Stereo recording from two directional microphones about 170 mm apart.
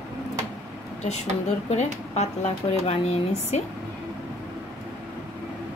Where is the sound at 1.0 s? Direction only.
40° left (ahead or behind).